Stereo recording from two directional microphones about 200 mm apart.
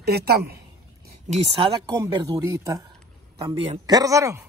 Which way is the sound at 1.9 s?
15° right (ahead or behind).